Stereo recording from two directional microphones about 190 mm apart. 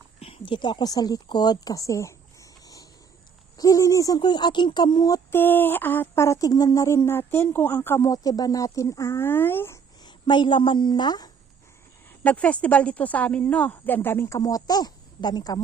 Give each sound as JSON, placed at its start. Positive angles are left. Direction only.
{"t": 0.2, "sound": "speech", "side_deg": 30}
{"t": 12.2, "sound": "speech", "side_deg": 10}